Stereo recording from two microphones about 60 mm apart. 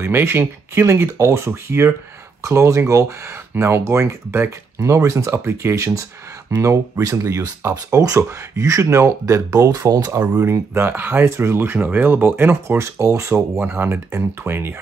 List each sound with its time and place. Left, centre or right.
0.0 s speech: right
2.4 s speech: right
4.8 s speech: right
10.4 s speech: right
10.9 s speech: right
11.2 s speech: right
12.6 s speech: right
13.6 s speech: right